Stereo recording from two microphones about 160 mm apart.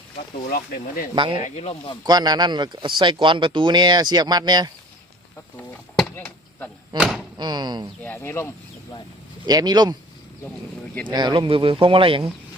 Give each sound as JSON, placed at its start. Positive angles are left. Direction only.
{"t": 0.5, "sound": "speech", "side_deg": 65}
{"t": 1.1, "sound": "speech", "side_deg": -30}
{"t": 1.4, "sound": "speech", "side_deg": 45}
{"t": 2.0, "sound": "a man's voice", "side_deg": -25}
{"t": 5.5, "sound": "a sound", "side_deg": 5}
{"t": 6.9, "sound": "a man's voice", "side_deg": -25}
{"t": 8.0, "sound": "speech", "side_deg": 15}
{"t": 9.5, "sound": "a man's voice", "side_deg": -25}
{"t": 11.1, "sound": "speech", "side_deg": -30}